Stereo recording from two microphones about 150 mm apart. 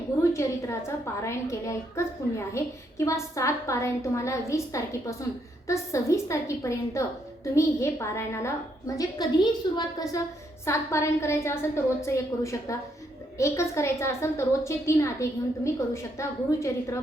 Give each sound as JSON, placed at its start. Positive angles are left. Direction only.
{"t": 0.2, "sound": "a woman's voice", "side_deg": 20}